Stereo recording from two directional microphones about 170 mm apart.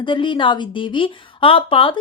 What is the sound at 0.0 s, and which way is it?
A woman's voice, 30° left (ahead or behind).